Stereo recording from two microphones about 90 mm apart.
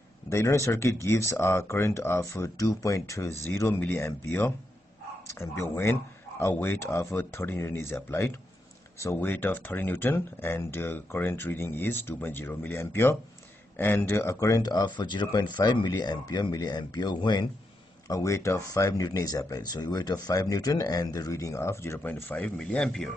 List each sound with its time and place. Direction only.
0.3 s speech: 30° left (ahead or behind)
2.5 s speech: 40° left (ahead or behind)
14.3 s speech: 40° left (ahead or behind)
18.0 s speech: 35° left (ahead or behind); by 23.1 s 10° left (ahead or behind)